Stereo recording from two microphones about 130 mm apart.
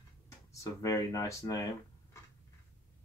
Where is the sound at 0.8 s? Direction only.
25° left (ahead or behind).